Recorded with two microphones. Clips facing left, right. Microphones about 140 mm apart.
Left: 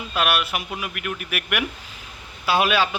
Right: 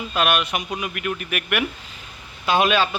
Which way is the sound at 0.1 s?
5° left (ahead or behind).